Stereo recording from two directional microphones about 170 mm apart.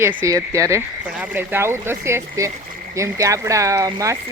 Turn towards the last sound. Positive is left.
turn(degrees=-20)  # may be behind; listen again after turning